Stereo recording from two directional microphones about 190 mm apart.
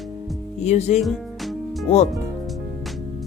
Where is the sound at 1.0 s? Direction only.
Centre (ahead or behind).